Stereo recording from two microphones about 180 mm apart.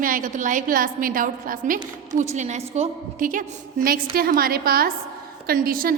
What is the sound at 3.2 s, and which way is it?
A woman's voice, 50° right (ahead or behind).